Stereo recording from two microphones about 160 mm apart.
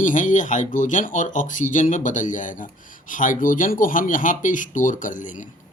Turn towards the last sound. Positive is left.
turn(degrees=55)  # may be behind; listen again after turning